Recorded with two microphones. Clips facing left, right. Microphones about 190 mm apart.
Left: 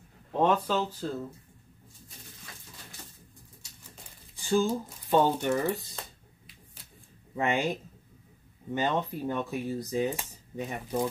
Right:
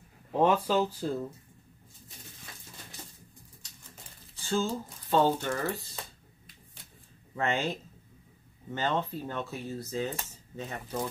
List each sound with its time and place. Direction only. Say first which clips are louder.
0.3 s speech: right 1 dB; 5° right (ahead or behind)
4.4 s speech: left 4 dB; 15° left (ahead or behind)
7.3 s speech: left 2 dB; 15° left (ahead or behind)
8.7 s speech: left 2 dB; 15° left (ahead or behind)